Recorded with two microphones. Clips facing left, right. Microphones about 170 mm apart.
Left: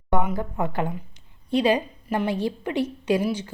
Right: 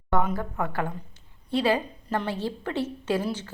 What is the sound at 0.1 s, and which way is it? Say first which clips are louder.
A woman's voice: left 1 dB; 15° left (ahead or behind).